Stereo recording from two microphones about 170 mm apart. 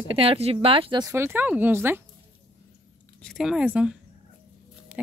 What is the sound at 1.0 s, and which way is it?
Speech, 15° right (ahead or behind).